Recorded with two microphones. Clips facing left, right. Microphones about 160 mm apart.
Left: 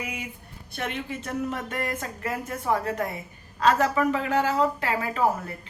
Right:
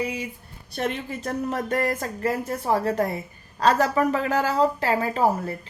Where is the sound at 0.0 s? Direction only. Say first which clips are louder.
Right 7 dB; 35° right (ahead or behind).